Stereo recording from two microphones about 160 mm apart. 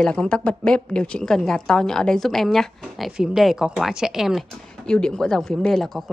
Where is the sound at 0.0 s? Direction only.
5° left (ahead or behind).